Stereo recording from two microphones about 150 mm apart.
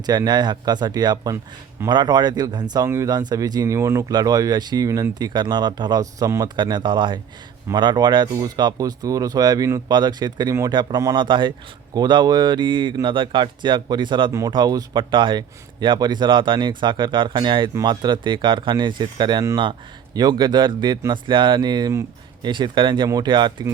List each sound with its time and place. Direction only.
0.0 s a man's voice: 30° right (ahead or behind)